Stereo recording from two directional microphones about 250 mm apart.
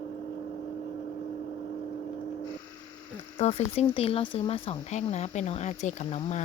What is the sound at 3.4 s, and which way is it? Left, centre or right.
Speech, left.